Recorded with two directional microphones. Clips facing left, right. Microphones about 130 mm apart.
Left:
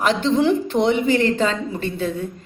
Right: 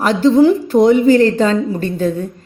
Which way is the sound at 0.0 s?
40° right (ahead or behind).